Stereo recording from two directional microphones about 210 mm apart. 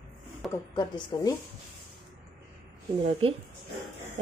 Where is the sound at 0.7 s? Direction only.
20° left (ahead or behind).